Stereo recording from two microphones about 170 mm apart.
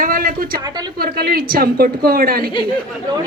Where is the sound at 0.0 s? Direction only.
55° right (ahead or behind).